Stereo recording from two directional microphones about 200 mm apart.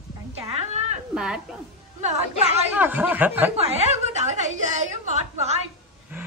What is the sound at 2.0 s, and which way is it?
Speech, 35° right (ahead or behind).